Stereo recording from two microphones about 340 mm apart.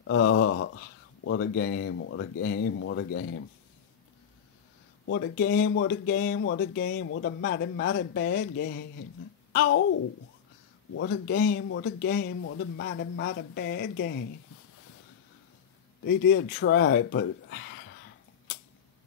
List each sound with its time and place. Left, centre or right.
0.0 s speech: left
5.0 s speech: left
11.0 s speech: left
16.1 s speech: left